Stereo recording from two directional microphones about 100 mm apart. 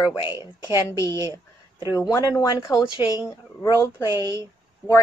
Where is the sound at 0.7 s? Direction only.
30° left (ahead or behind).